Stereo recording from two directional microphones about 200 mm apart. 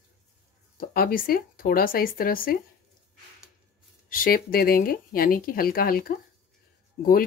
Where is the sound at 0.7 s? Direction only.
45° left (ahead or behind).